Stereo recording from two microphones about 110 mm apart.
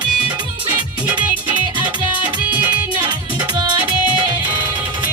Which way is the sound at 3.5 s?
40° right (ahead or behind).